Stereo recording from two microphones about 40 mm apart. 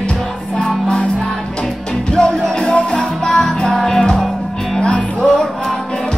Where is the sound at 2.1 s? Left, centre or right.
Left.